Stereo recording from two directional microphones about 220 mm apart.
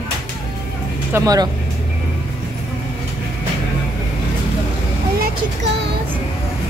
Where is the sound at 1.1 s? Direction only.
15° right (ahead or behind).